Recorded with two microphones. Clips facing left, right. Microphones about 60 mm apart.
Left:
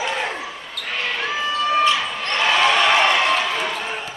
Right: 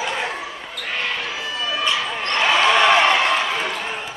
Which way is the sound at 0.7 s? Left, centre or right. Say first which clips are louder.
Even; centre.